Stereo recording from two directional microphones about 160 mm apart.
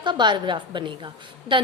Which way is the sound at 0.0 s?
30° right (ahead or behind).